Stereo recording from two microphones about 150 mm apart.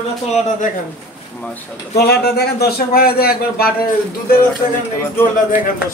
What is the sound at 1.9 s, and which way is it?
A man's voice, 90° left.